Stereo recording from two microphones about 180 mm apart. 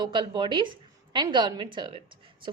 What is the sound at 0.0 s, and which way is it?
A woman's voice, 25° right (ahead or behind).